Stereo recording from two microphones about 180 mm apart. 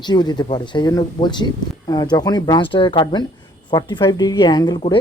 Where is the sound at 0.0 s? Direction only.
25° left (ahead or behind).